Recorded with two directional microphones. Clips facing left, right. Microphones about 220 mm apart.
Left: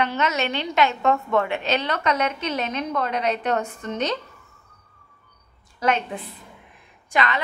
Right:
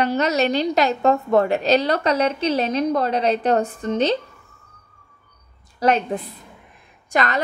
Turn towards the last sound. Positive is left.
turn(degrees=-45)  # may be behind; listen again after turning